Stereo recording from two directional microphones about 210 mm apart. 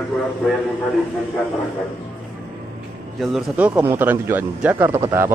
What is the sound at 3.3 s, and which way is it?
A man's voice, 10° right (ahead or behind).